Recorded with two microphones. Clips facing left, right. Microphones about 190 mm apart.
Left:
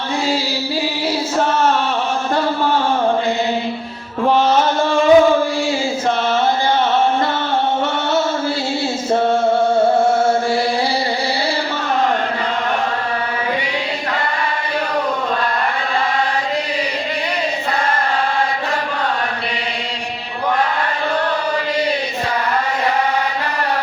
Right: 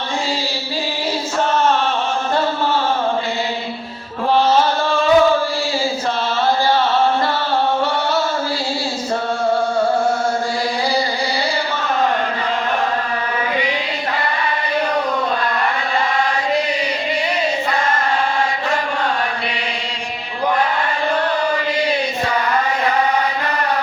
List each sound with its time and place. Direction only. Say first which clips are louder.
4.9 s chant: left 3 dB; 15° left (ahead or behind)